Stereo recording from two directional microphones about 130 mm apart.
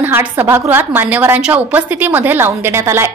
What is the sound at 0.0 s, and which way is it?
A woman's voice, 15° right (ahead or behind).